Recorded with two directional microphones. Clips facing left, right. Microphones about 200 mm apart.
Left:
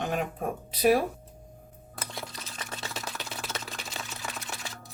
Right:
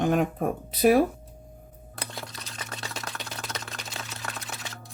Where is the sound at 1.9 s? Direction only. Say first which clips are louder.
Right 1 dB; centre (ahead or behind).